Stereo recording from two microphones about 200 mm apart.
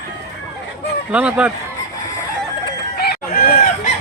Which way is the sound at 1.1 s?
5° right (ahead or behind).